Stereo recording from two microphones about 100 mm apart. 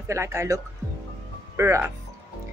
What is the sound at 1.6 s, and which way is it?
Speech, 25° right (ahead or behind).